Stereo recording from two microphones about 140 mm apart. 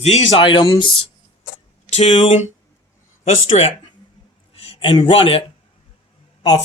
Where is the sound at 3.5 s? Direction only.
45° left (ahead or behind).